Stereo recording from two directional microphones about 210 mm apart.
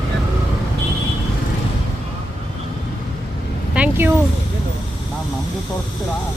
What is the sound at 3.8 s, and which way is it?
Vehicle, 10° right (ahead or behind).